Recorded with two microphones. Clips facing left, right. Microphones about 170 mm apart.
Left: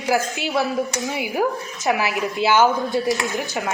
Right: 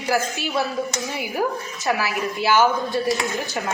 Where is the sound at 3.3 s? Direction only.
20° left (ahead or behind).